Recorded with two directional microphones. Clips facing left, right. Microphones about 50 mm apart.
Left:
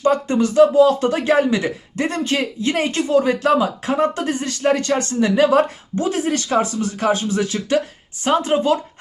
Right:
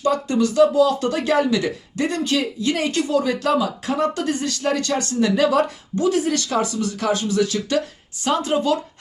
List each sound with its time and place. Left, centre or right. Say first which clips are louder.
0.0 s speech: left 2 dB; left